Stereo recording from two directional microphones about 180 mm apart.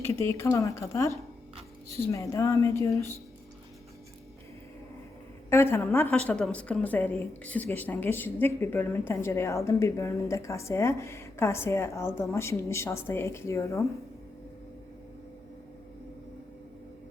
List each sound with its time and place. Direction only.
0.1 s a woman's voice: 15° left (ahead or behind)
5.5 s a woman's voice: 15° left (ahead or behind)